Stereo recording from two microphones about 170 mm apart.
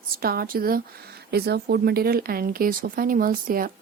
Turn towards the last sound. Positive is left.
turn(degrees=-55)  # may be behind; listen again after turning